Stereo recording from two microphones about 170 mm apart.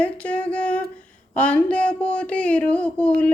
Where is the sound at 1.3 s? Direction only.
10° left (ahead or behind).